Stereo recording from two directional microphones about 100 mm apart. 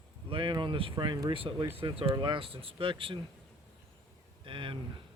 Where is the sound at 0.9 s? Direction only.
45° right (ahead or behind).